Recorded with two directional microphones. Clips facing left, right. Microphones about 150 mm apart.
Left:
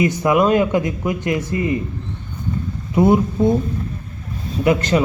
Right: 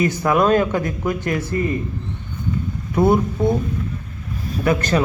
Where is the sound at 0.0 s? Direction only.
15° left (ahead or behind).